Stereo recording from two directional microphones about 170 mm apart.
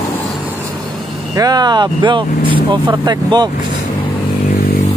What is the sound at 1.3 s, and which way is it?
Speech, 25° right (ahead or behind).